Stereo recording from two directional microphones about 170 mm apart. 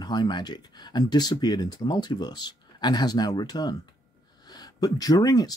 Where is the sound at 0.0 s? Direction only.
25° left (ahead or behind).